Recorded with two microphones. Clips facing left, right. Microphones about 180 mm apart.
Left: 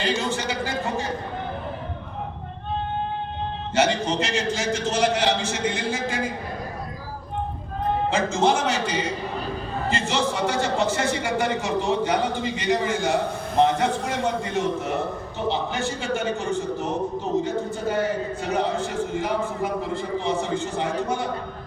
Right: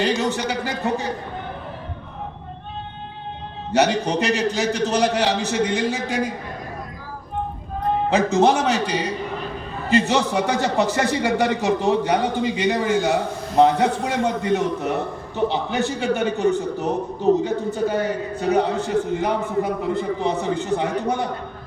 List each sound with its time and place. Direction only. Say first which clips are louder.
0.2 s a man's voice: right 3 dB; 65° right (ahead or behind)
3.7 s a man's voice: right 3 dB; 65° right (ahead or behind)
8.1 s a man's voice: right 6 dB; 65° right (ahead or behind)